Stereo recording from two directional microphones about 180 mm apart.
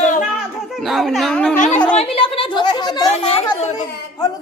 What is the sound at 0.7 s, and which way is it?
Speech, centre (ahead or behind).